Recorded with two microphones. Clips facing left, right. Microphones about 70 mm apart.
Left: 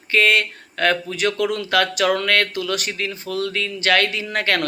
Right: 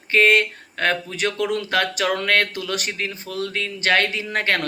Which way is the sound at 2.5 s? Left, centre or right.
Right.